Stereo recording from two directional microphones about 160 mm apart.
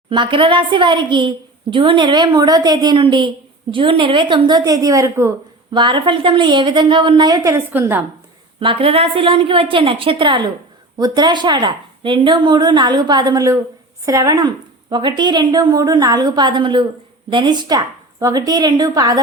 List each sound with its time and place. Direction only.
0.1 s a woman's voice: 30° right (ahead or behind)
5.7 s a woman's voice: 30° right (ahead or behind); by 8.0 s 10° right (ahead or behind)
8.5 s a woman's voice: 35° right (ahead or behind)